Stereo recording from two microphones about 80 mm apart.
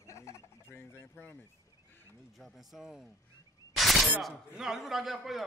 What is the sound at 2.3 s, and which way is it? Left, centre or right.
Speech, centre.